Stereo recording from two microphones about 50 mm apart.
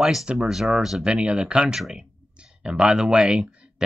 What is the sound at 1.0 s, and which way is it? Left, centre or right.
Speech, right.